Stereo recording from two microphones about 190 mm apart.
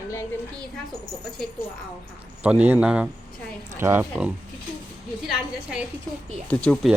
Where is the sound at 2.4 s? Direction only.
10° right (ahead or behind).